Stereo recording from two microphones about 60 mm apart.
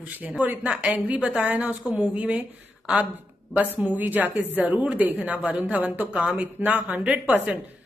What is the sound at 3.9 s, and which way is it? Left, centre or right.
Speech, right.